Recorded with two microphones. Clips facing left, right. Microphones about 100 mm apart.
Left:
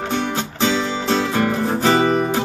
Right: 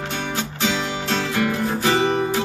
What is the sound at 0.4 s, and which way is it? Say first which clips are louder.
Music: left 4 dB; 35° left (ahead or behind).